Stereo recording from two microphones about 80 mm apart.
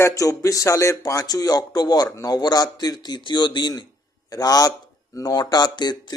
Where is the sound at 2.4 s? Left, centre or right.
Left.